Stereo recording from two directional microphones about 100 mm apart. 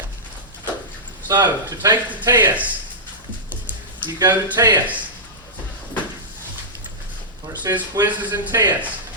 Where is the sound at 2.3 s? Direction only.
30° right (ahead or behind).